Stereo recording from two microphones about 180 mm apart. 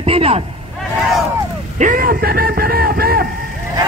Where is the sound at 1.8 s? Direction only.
50° right (ahead or behind).